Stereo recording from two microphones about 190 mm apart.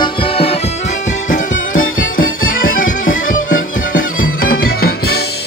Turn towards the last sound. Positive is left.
turn(degrees=55)  # may be behind; listen again after turning